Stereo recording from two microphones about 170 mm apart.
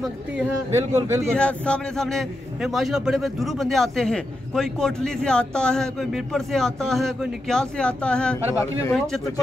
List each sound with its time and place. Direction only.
0.7 s a man's voice: 15° right (ahead or behind)
1.2 s a man's voice: 5° left (ahead or behind)